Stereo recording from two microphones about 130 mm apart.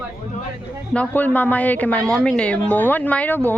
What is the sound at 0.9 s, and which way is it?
Speech, 15° left (ahead or behind).